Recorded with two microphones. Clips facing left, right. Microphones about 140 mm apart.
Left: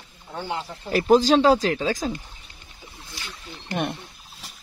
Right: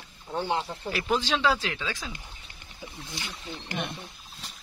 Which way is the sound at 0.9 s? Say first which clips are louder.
Left 11 dB; 40° left (ahead or behind).